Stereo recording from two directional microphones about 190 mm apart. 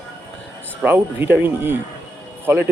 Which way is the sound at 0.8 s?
10° right (ahead or behind).